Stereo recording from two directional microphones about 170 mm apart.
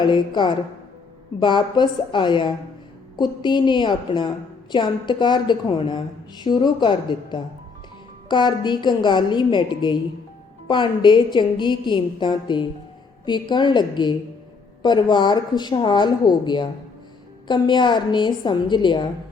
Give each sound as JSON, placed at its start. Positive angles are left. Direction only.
{"t": 0.0, "sound": "a woman's voice", "side_deg": 25}